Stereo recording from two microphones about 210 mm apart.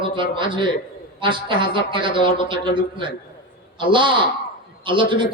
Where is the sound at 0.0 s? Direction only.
25° right (ahead or behind).